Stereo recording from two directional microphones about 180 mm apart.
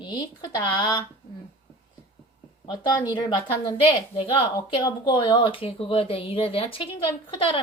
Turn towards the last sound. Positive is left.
turn(degrees=30)  # may be behind; listen again after turning